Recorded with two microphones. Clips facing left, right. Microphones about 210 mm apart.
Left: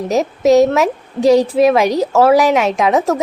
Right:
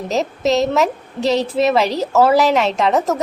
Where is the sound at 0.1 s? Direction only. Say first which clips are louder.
Left 6 dB; 10° left (ahead or behind).